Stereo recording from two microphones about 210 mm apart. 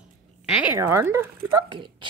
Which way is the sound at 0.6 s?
10° right (ahead or behind).